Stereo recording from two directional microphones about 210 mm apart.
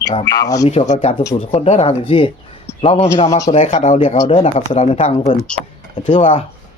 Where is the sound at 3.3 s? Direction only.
15° left (ahead or behind).